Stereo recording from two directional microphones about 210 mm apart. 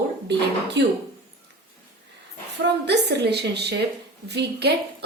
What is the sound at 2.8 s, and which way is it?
A woman's voice, 55° right (ahead or behind).